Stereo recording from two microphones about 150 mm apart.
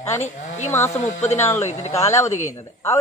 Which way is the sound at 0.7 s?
20° left (ahead or behind).